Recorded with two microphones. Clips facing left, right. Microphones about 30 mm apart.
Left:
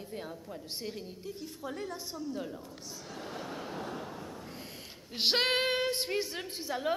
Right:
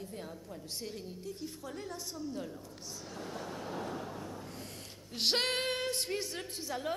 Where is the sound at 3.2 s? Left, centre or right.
Left.